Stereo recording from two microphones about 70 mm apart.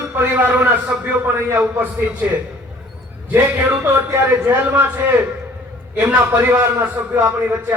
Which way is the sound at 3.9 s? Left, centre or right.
Right.